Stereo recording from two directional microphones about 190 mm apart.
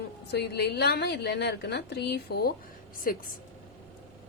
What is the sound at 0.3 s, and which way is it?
A woman's voice, 60° left (ahead or behind).